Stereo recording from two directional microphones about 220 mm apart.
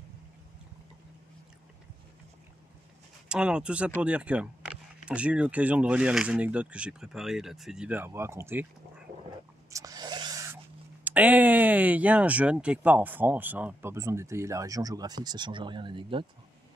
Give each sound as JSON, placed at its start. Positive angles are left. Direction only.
{"t": 3.3, "sound": "speech", "side_deg": -5}
{"t": 9.7, "sound": "a sound", "side_deg": -15}
{"t": 11.1, "sound": "speech", "side_deg": -5}